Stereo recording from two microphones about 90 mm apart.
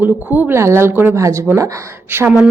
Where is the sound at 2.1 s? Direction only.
25° right (ahead or behind).